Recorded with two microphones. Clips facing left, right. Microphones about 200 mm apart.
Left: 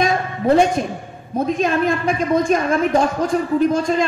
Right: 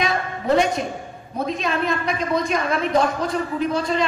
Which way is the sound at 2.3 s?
45° left (ahead or behind).